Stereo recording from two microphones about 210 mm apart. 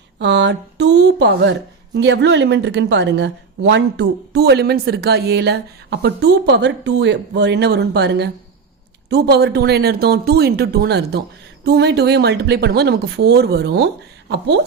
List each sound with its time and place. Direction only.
0.2 s a woman's voice: 55° right (ahead or behind)